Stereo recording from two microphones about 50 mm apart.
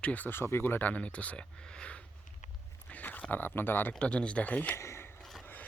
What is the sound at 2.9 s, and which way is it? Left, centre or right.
Speech, left.